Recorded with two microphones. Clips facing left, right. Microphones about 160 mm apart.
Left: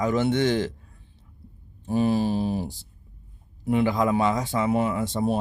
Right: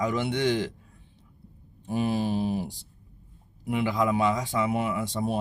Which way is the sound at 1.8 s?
35° left (ahead or behind).